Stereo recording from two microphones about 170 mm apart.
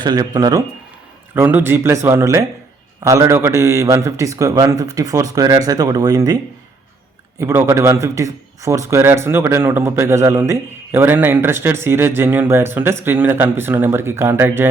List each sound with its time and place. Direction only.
0.0 s a man's voice: 25° right (ahead or behind)